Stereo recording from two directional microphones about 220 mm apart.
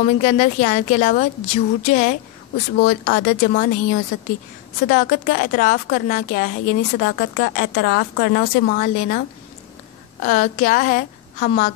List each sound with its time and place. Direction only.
0.0 s a woman's voice: 35° left (ahead or behind)
2.9 s a woman's voice: 45° left (ahead or behind)
10.2 s a woman's voice: 35° left (ahead or behind)